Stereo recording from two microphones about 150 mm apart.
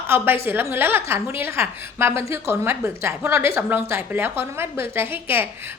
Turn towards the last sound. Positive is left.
turn(degrees=-15)  # may be behind; listen again after turning